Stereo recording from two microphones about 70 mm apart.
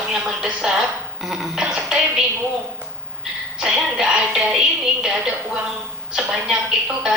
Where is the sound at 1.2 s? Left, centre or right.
Centre.